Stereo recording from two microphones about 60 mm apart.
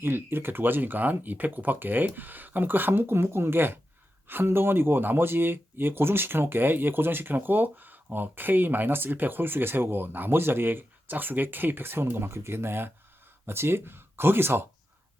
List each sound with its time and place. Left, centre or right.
0.0 s speech: right